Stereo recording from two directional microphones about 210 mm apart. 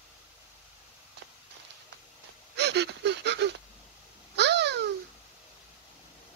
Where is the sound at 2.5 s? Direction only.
55° right (ahead or behind).